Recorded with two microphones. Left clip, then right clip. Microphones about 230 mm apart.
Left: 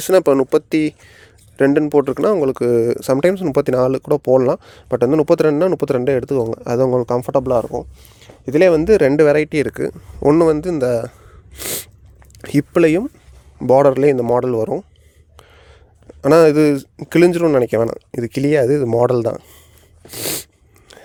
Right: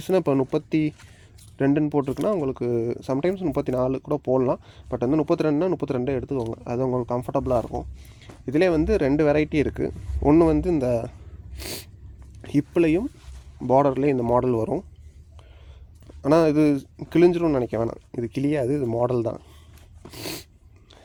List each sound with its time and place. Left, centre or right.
0.0 s speech: left
16.2 s speech: left
20.1 s sneeze: left